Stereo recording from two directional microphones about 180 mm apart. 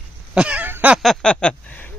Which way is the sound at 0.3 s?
5° right (ahead or behind).